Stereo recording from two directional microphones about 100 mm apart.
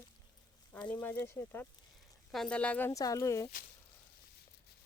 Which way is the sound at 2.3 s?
Centre (ahead or behind).